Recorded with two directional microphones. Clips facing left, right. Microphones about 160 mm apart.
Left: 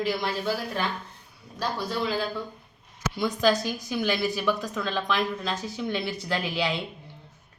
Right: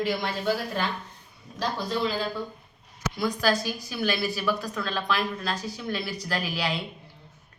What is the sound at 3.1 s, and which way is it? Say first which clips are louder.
A woman's voice: left 2 dB; 20° left (ahead or behind).